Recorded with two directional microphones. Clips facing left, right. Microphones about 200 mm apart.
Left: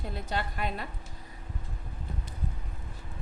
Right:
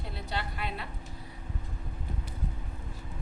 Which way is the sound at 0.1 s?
45° left (ahead or behind).